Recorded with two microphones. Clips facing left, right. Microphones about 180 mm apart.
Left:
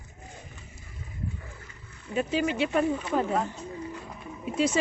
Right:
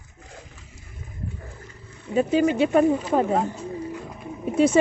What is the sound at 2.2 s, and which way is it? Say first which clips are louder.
Speech: right 7 dB; 40° right (ahead or behind).